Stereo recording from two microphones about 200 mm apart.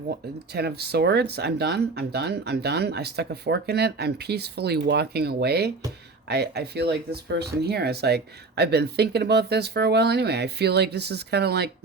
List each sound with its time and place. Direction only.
0.5 s speech: 55° right (ahead or behind)